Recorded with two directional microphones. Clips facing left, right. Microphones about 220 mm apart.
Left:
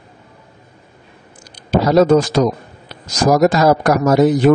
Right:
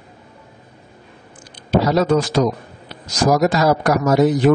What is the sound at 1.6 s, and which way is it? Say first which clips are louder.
A man's voice: left 4 dB; 45° left (ahead or behind).